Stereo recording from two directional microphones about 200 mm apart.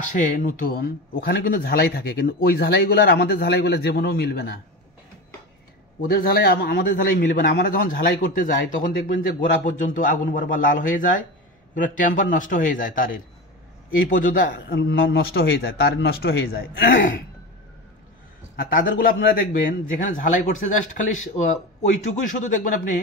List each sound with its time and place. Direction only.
0.1 s speech: 40° left (ahead or behind); by 4.6 s 55° left (ahead or behind)
5.9 s speech: 45° left (ahead or behind)
14.8 s speech: 65° left (ahead or behind); by 17.1 s 50° left (ahead or behind)
18.6 s speech: 45° left (ahead or behind)
22.0 s speech: 40° left (ahead or behind)